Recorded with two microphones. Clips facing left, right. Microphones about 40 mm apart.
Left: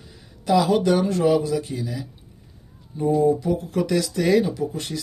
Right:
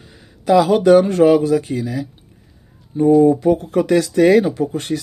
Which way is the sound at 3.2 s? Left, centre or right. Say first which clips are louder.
Right 7 dB; right.